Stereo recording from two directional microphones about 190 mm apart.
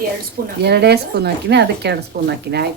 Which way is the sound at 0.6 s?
60° right (ahead or behind).